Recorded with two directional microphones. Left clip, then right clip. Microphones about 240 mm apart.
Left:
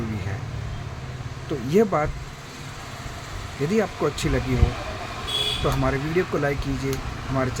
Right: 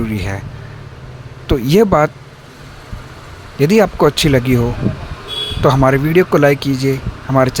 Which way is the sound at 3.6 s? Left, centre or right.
Right.